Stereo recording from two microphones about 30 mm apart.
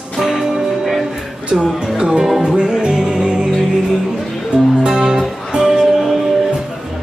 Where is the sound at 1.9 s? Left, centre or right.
Right.